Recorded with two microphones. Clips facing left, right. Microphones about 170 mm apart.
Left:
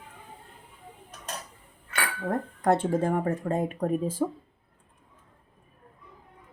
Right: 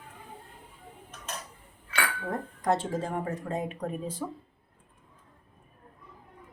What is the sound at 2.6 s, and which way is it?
Speech, 60° left (ahead or behind).